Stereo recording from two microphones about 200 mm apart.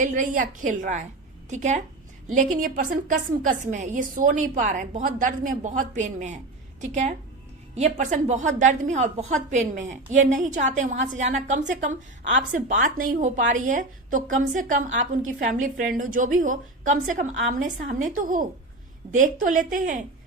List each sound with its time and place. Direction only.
0.0 s a woman's voice: 40° right (ahead or behind)